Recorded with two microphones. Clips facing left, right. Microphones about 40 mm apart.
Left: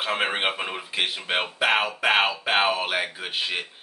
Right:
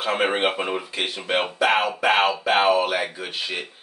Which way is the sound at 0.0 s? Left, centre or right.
Centre.